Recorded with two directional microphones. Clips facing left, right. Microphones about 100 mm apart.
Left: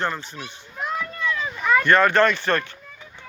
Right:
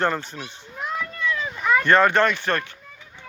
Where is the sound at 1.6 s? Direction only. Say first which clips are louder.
Left 1 dB; 5° right (ahead or behind).